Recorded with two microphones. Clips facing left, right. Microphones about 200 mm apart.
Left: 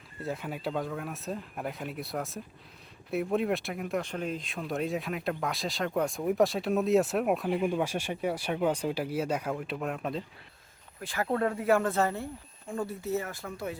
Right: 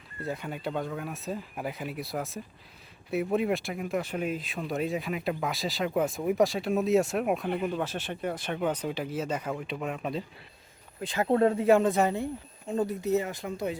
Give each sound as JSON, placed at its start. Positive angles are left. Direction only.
{"t": 0.2, "sound": "speech", "side_deg": 0}
{"t": 7.6, "sound": "speech", "side_deg": 10}
{"t": 11.0, "sound": "speech", "side_deg": -20}